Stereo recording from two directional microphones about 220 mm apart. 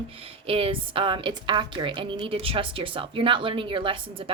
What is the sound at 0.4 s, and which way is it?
A woman's voice, 25° right (ahead or behind).